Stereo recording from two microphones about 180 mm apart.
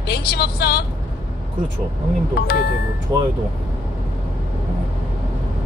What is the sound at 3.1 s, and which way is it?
Speech, 15° right (ahead or behind).